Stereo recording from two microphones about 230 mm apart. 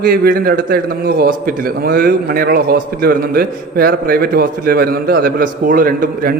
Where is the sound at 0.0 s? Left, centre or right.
Right.